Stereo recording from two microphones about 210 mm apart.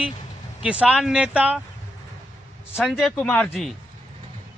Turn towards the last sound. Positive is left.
turn(degrees=0)  # may be behind; listen again after turning